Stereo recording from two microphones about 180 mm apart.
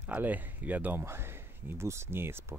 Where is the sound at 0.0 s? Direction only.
10° right (ahead or behind).